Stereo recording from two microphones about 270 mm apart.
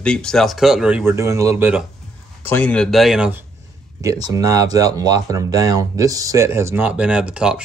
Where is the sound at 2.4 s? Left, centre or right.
Centre.